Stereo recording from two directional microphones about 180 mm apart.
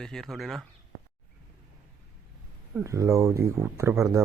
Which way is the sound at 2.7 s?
15° right (ahead or behind).